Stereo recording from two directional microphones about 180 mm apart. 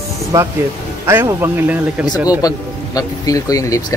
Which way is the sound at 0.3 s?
15° right (ahead or behind).